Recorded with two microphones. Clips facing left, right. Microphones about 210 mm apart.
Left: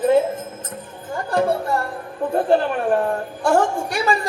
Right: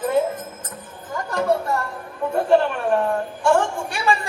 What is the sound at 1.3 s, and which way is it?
Music, 30° left (ahead or behind).